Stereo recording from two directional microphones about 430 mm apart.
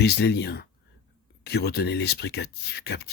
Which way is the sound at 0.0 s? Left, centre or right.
Left.